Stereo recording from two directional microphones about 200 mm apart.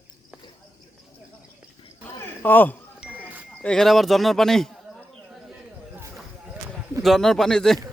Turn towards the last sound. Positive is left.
turn(degrees=0)  # may be behind; listen again after turning